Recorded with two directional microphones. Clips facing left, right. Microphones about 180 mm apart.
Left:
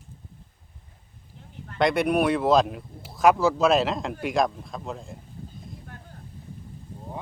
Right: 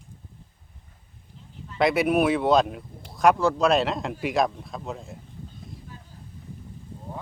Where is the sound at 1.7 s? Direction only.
5° right (ahead or behind).